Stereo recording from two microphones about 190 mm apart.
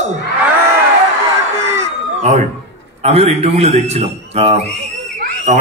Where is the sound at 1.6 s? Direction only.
15° right (ahead or behind).